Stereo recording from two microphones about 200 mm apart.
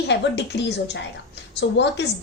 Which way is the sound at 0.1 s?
60° left (ahead or behind).